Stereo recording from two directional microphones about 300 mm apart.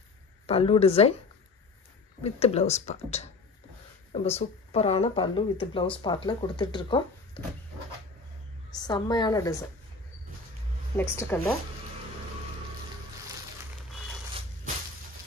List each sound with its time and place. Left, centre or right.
0.5 s speech: centre
2.2 s speech: left
8.8 s speech: centre
11.0 s speech: centre